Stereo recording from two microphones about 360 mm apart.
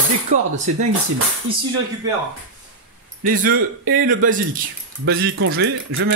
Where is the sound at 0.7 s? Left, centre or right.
Right.